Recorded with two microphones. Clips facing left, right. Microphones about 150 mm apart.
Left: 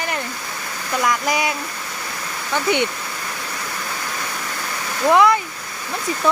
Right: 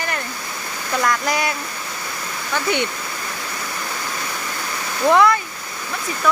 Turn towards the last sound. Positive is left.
turn(degrees=15)  # may be behind; listen again after turning